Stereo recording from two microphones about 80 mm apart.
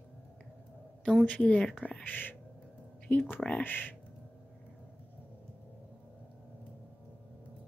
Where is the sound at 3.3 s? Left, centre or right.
Centre.